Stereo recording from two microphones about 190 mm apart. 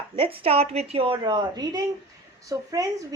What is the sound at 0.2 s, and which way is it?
A woman's voice, 30° right (ahead or behind).